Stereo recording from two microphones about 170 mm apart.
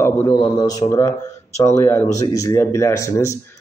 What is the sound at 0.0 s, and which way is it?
A man's voice, 20° left (ahead or behind).